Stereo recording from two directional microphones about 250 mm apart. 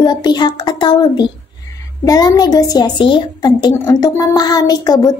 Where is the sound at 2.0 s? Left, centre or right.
Centre.